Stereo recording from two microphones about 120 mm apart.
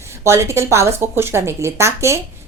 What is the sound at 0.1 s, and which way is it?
A woman's voice, 25° right (ahead or behind).